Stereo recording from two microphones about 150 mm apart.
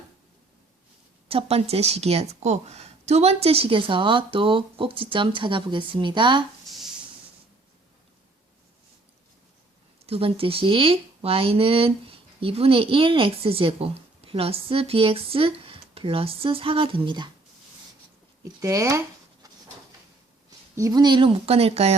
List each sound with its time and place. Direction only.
1.3 s speech: 40° right (ahead or behind)
10.1 s speech: 40° right (ahead or behind)
18.6 s speech: 20° right (ahead or behind)
20.7 s speech: 25° right (ahead or behind); by 21.9 s 45° right (ahead or behind)